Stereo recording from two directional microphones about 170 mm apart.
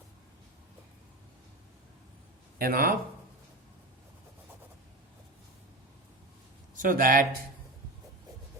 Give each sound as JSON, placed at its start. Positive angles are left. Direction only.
{"t": 2.6, "sound": "speech", "side_deg": -60}
{"t": 6.8, "sound": "speech", "side_deg": -55}